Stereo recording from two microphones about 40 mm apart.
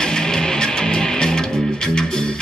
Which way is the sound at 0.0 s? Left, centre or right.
Centre.